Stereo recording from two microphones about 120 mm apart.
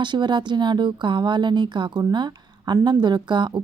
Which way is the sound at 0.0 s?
40° right (ahead or behind).